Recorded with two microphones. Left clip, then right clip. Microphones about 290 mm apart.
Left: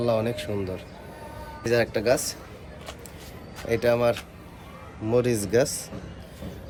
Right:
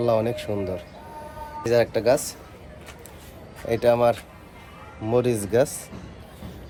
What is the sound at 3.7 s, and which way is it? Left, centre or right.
Speech, centre.